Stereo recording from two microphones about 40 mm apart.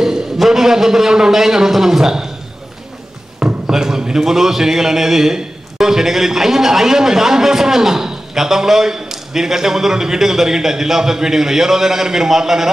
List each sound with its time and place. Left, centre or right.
0.4 s a man's voice: centre
3.3 s a sound: right
3.7 s a man's voice: centre